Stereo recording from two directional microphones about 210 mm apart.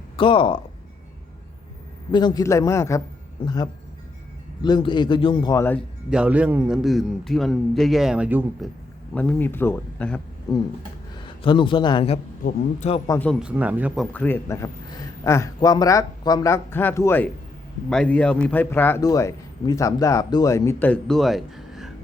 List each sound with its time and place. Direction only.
0.2 s a man's voice: 25° left (ahead or behind)
2.1 s a man's voice: 20° left (ahead or behind)
6.1 s a man's voice: 5° right (ahead or behind)
9.1 s a man's voice: 10° left (ahead or behind)
11.4 s a man's voice: 25° left (ahead or behind)
12.4 s speech: 40° left (ahead or behind)
13.1 s a man's voice: 10° left (ahead or behind)
13.4 s a man's voice: 5° right (ahead or behind)